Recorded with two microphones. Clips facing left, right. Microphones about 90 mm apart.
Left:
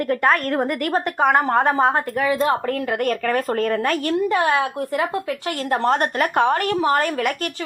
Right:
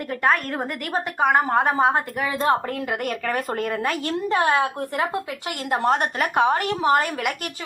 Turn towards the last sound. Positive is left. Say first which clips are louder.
# left 4 dB
turn(degrees=-15)  # may be behind; listen again after turning